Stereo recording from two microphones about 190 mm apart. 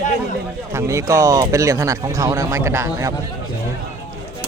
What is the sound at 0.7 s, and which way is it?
Speech, 15° right (ahead or behind).